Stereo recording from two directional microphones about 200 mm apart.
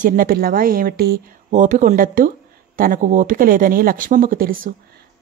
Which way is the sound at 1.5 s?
40° right (ahead or behind).